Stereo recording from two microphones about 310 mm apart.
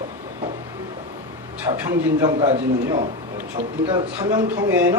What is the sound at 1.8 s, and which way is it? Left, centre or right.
Speech, centre.